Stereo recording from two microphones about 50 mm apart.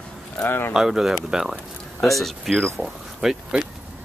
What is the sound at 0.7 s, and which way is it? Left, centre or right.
Speech, centre.